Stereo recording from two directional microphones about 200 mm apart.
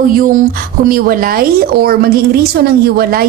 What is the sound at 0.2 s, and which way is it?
A woman's voice, 45° right (ahead or behind).